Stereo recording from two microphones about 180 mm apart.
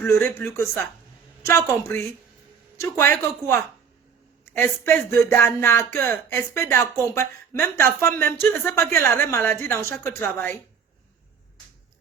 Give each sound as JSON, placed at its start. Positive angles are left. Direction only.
{"t": 0.0, "sound": "speech", "side_deg": 15}
{"t": 4.6, "sound": "speech", "side_deg": 10}